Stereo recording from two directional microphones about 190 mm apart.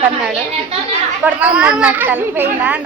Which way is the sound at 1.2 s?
5° right (ahead or behind).